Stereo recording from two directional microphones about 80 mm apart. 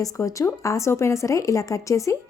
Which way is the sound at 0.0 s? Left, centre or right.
Left.